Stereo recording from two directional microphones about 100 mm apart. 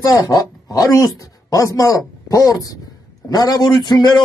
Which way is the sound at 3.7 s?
45° left (ahead or behind).